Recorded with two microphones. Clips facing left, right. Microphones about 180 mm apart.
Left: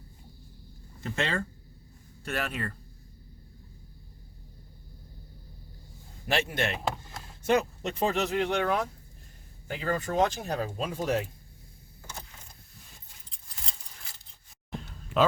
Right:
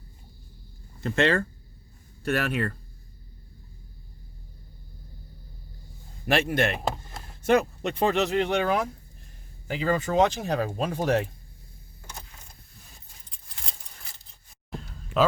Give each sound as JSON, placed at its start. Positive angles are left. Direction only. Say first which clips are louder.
{"t": 1.0, "sound": "speech", "louder": "right 8 dB", "side_deg": -65}
{"t": 6.2, "sound": "speech", "louder": "right 5 dB", "side_deg": -60}
{"t": 9.6, "sound": "speech", "louder": "right 5 dB", "side_deg": -90}
{"t": 14.7, "sound": "a sound", "louder": "right 1 dB", "side_deg": 0}